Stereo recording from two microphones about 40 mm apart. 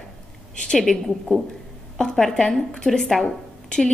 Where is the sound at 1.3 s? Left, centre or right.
Left.